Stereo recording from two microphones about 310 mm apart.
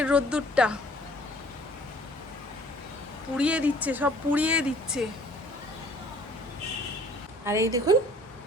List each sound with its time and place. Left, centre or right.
0.0 s speech: centre
3.3 s speech: centre
7.4 s a woman's voice: centre